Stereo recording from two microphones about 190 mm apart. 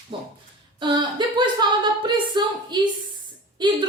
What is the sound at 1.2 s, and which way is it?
A woman's voice, 25° right (ahead or behind).